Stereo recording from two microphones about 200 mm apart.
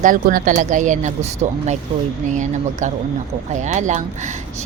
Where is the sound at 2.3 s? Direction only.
40° right (ahead or behind).